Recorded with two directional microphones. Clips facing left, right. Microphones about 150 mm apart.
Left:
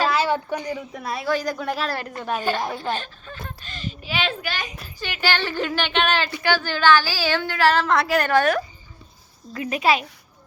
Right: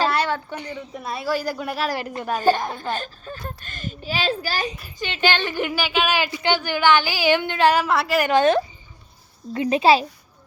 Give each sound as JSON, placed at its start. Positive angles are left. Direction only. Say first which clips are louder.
{"t": 0.0, "sound": "a sound", "louder": "even", "side_deg": 0}
{"t": 0.3, "sound": "a woman's voice", "louder": "left 4 dB", "side_deg": 15}
{"t": 0.9, "sound": "a woman's voice", "louder": "right 1 dB", "side_deg": 0}
{"t": 2.3, "sound": "a child's voice", "louder": "right 4 dB", "side_deg": -40}
{"t": 4.9, "sound": "a woman's voice", "louder": "right 2 dB", "side_deg": -20}
{"t": 5.8, "sound": "a woman's voice", "louder": "even", "side_deg": -5}
{"t": 8.3, "sound": "a woman's voice", "louder": "right 2 dB", "side_deg": -20}